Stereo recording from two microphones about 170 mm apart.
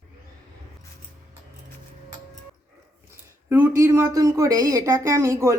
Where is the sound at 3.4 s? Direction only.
15° right (ahead or behind).